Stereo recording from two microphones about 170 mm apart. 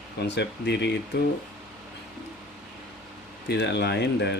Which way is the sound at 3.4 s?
85° left.